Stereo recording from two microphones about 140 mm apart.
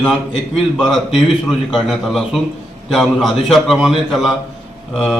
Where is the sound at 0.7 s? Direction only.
Centre (ahead or behind).